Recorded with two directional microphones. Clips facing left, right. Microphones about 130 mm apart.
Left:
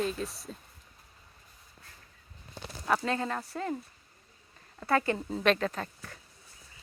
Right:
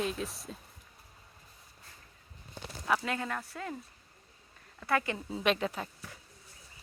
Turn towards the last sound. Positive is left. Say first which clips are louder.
# left 2 dB
turn(degrees=-15)  # may be behind; listen again after turning